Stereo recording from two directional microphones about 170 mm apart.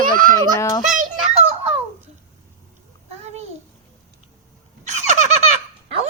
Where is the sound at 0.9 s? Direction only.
50° right (ahead or behind).